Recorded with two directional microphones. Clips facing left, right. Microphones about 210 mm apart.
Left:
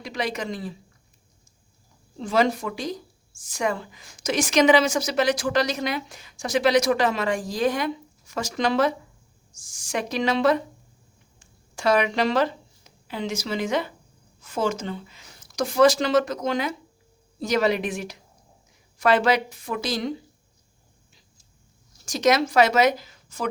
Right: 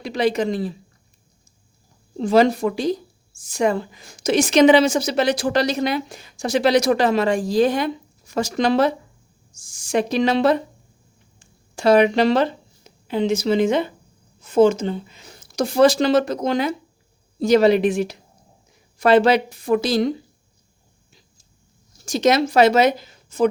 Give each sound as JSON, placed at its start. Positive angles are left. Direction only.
{"t": 0.0, "sound": "speech", "side_deg": -30}
{"t": 2.2, "sound": "a woman's voice", "side_deg": -35}
{"t": 11.7, "sound": "a woman's voice", "side_deg": -30}
{"t": 22.0, "sound": "speech", "side_deg": -25}